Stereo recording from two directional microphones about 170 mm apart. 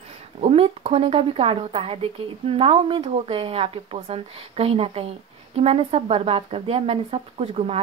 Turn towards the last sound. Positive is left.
turn(degrees=-35)  # may be behind; listen again after turning